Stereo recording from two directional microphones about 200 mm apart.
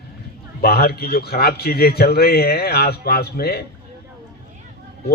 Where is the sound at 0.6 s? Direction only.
50° left (ahead or behind).